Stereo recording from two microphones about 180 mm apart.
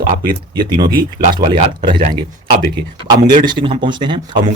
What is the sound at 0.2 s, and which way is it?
Speech, 20° right (ahead or behind).